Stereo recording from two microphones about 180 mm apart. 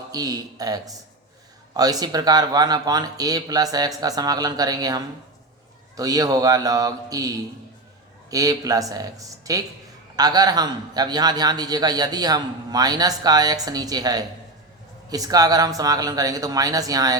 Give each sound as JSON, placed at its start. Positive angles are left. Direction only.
{"t": 0.1, "sound": "a man's voice", "side_deg": -20}